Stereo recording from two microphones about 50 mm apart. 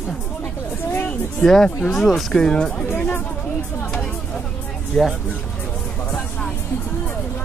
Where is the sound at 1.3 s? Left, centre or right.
Centre.